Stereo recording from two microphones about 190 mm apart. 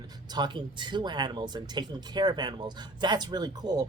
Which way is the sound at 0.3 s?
25° right (ahead or behind).